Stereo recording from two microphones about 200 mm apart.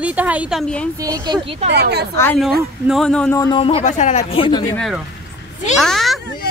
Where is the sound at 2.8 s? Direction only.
Centre (ahead or behind).